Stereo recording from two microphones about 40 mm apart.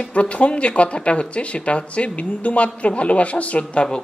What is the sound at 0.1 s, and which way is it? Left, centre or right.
A man's voice, left.